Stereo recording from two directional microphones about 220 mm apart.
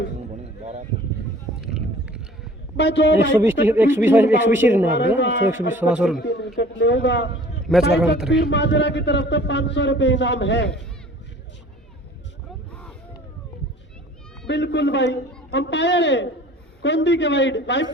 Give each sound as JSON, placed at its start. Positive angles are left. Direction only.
{"t": 1.6, "sound": "a sound", "side_deg": -5}
{"t": 2.7, "sound": "a man's voice", "side_deg": 55}
{"t": 3.4, "sound": "speech", "side_deg": -10}
{"t": 4.9, "sound": "speech", "side_deg": 55}
{"t": 5.5, "sound": "speech", "side_deg": -10}
{"t": 6.2, "sound": "a man's voice", "side_deg": 55}
{"t": 7.7, "sound": "speech", "side_deg": 5}
{"t": 8.4, "sound": "a man's voice", "side_deg": 55}
{"t": 14.4, "sound": "a man's voice", "side_deg": 55}